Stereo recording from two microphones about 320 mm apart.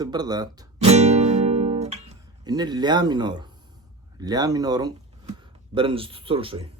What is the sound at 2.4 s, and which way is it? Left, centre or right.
Speech, centre.